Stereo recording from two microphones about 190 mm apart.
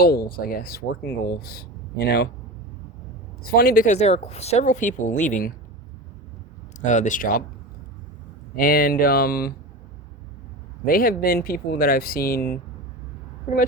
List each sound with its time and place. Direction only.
0.0 s speech: 55° left (ahead or behind)
3.4 s speech: 50° left (ahead or behind)
6.8 s speech: 40° left (ahead or behind)
8.5 s speech: 50° left (ahead or behind)
10.8 s speech: 50° left (ahead or behind)